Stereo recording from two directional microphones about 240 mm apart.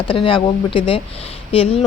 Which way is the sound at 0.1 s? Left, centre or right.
Left.